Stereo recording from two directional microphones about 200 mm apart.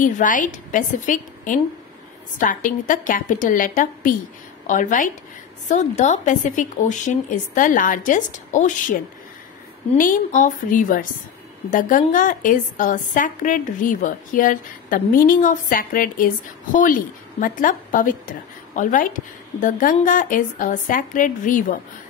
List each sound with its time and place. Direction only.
0.0 s a woman's voice: 40° left (ahead or behind)
9.9 s a woman's voice: 40° left (ahead or behind)